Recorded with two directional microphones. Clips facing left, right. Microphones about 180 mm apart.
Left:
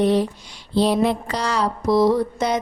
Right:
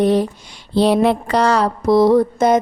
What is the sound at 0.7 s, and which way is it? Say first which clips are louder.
Mantra: right 4 dB; 65° right (ahead or behind).